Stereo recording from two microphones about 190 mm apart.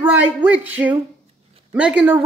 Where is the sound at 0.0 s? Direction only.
10° right (ahead or behind).